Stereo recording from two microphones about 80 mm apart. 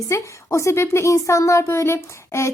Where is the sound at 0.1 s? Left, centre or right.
Left.